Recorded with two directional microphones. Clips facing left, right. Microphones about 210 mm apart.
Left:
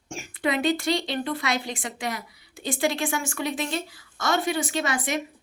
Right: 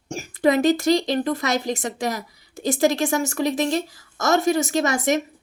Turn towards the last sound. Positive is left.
turn(degrees=-40)  # may be behind; listen again after turning